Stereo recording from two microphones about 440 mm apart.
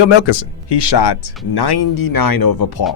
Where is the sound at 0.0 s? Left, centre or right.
Left.